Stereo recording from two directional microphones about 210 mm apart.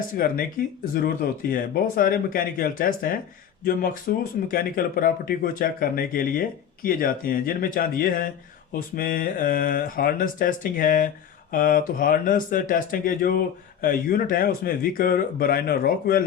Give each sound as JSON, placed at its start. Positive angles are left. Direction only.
{"t": 0.2, "sound": "speech", "side_deg": 45}